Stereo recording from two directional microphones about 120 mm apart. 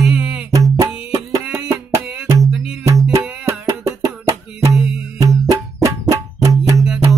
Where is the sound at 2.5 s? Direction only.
5° right (ahead or behind).